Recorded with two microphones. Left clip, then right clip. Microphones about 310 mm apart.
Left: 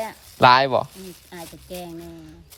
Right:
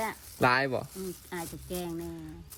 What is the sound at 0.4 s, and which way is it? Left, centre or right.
Speech, left.